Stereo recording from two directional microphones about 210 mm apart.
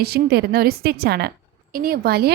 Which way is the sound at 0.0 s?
50° right (ahead or behind).